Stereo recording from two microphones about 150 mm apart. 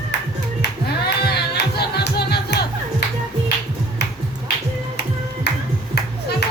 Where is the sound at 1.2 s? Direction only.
90° left.